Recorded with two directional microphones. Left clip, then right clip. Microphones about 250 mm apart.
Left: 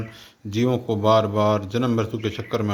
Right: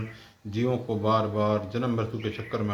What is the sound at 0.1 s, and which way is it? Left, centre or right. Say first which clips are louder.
Speech: left 7 dB; left.